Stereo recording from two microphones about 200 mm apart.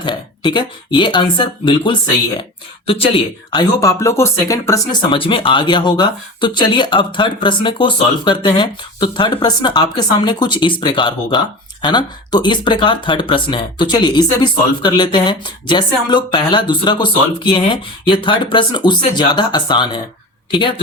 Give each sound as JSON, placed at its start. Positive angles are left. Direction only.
{"t": 0.0, "sound": "speech", "side_deg": 25}
{"t": 5.1, "sound": "speech", "side_deg": 25}